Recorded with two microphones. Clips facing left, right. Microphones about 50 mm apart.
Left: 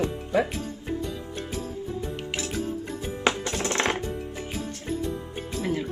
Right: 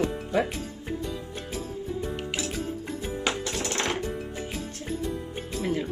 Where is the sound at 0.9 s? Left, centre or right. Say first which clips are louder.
Left 1 dB; centre.